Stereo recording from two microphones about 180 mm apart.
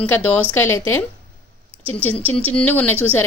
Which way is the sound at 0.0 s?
10° left (ahead or behind).